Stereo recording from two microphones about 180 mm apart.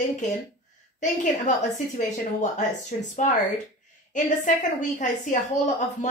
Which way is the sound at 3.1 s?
45° left (ahead or behind).